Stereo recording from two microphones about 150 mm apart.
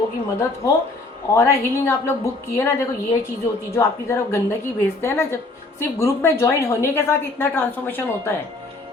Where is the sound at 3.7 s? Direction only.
20° left (ahead or behind).